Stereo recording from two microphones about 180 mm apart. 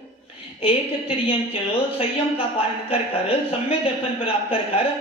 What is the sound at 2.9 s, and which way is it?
Speech, 30° left (ahead or behind).